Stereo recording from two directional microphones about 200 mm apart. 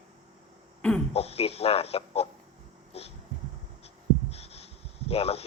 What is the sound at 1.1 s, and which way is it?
Speech, 30° left (ahead or behind).